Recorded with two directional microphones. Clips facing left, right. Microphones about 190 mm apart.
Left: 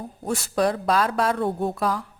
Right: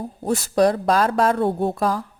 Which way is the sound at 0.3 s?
40° right (ahead or behind).